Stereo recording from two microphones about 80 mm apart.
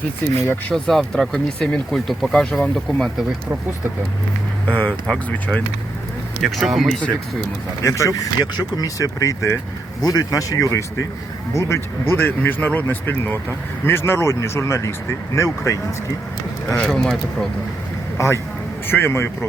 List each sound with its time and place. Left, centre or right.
0.7 s speech: centre
4.7 s speech: left
5.0 s speech: centre
6.4 s speech: centre
7.8 s speech: left
16.6 s speech: centre
18.9 s speech: left